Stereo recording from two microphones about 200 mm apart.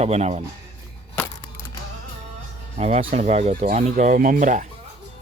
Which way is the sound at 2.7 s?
30° right (ahead or behind).